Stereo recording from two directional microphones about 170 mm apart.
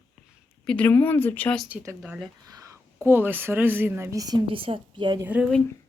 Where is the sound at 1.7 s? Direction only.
15° right (ahead or behind).